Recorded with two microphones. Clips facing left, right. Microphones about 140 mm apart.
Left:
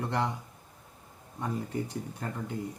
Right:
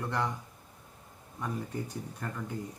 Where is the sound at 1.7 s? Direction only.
70° left (ahead or behind).